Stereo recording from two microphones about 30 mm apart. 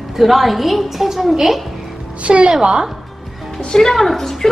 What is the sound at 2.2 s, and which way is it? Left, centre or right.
Speech, right.